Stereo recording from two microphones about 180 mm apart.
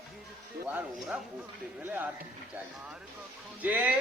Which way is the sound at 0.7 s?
5° right (ahead or behind).